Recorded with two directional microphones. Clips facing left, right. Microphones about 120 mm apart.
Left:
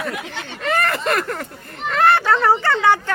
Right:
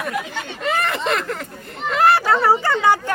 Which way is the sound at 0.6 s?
Centre (ahead or behind).